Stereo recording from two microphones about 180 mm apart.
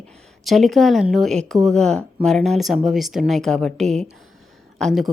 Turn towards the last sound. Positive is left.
turn(degrees=0)  # may be behind; listen again after turning